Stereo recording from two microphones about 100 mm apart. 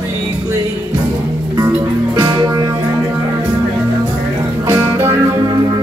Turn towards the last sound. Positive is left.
turn(degrees=-35)  # may be behind; listen again after turning